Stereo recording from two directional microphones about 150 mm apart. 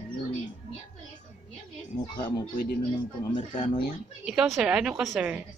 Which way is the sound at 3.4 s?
40° left (ahead or behind).